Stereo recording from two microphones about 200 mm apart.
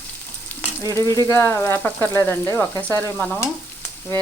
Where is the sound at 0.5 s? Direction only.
10° left (ahead or behind).